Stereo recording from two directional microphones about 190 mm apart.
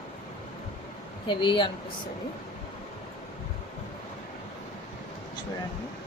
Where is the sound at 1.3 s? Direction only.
25° left (ahead or behind).